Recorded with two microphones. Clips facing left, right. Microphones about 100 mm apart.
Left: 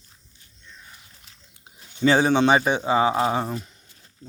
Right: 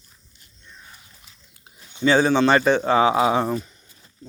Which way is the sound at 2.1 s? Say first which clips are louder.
Right 2 dB; 20° left (ahead or behind).